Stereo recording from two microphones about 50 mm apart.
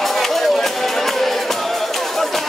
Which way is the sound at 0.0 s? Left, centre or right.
Centre.